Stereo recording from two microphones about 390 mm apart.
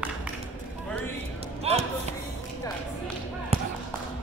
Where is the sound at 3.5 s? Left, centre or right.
Centre.